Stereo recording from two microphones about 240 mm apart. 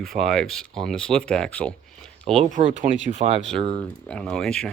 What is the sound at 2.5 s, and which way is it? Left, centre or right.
Speech, right.